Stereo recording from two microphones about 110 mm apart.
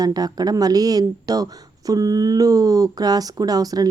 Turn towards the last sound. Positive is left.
turn(degrees=-35)  # may be behind; listen again after turning